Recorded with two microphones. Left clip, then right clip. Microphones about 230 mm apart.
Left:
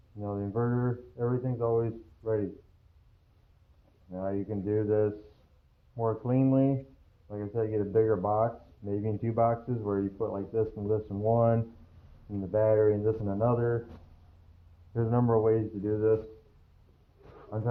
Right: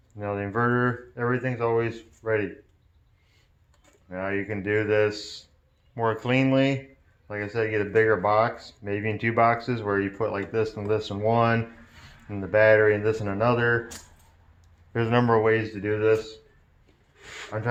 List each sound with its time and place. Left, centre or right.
0.2 s speech: right
4.1 s speech: right
14.9 s speech: right
17.5 s speech: right